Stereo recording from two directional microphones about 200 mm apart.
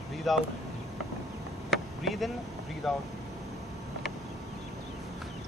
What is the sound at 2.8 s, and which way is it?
Speech, centre (ahead or behind).